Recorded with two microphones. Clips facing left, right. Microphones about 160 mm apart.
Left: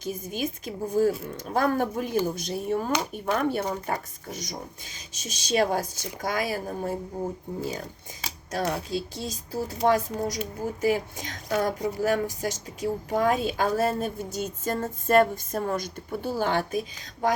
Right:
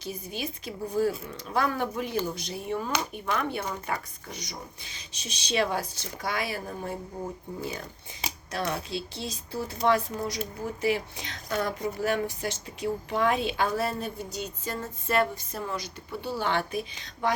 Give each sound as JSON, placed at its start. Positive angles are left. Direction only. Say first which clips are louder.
{"t": 0.0, "sound": "a woman's voice", "louder": "left 4 dB", "side_deg": 45}